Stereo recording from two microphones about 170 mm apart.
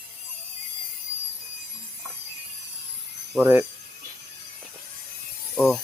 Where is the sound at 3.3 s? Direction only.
10° right (ahead or behind).